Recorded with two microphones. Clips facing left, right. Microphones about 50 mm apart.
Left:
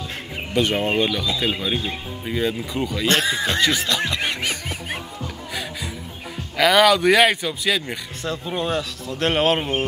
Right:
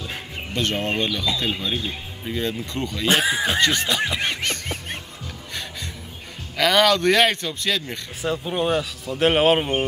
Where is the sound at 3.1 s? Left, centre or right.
Centre.